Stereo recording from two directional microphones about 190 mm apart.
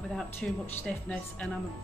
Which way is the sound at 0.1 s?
Centre (ahead or behind).